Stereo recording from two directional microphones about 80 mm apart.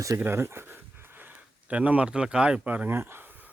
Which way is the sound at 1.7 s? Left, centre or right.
Centre.